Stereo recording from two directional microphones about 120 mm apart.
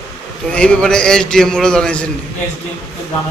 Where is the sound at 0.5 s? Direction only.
10° left (ahead or behind).